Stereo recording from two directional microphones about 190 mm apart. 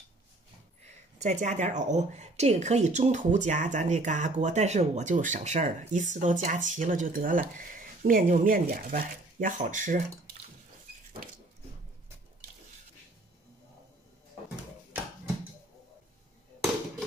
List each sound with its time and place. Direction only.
1.1 s speech: 35° right (ahead or behind)